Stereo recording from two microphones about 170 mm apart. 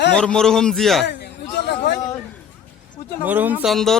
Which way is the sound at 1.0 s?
75° left (ahead or behind).